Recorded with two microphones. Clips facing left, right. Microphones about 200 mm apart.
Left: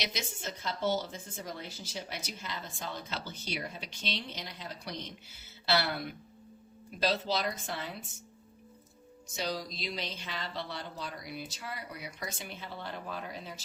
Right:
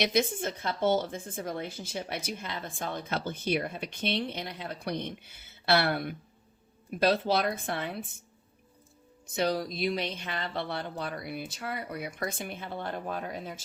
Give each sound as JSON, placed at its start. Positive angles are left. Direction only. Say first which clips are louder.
{"t": 0.0, "sound": "a woman's voice", "louder": "right 11 dB", "side_deg": -55}
{"t": 9.2, "sound": "a woman's voice", "louder": "right 7 dB", "side_deg": -55}